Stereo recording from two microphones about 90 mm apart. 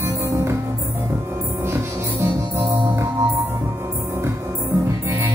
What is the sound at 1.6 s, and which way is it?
Music, 30° right (ahead or behind).